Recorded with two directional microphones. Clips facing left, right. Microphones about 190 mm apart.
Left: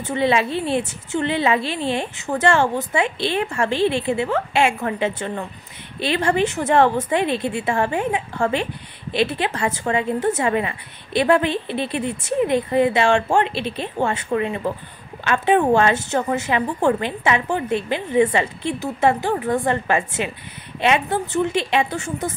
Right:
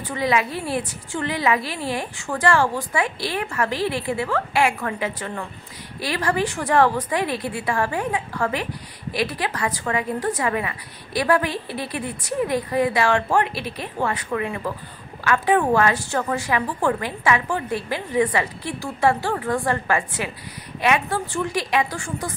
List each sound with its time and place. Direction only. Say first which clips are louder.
0.0 s a woman's voice: left 3 dB; 25° left (ahead or behind)